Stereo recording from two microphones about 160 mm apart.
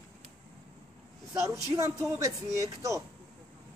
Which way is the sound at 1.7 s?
20° right (ahead or behind).